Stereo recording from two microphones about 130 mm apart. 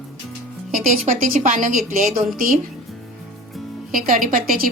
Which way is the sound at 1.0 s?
80° right.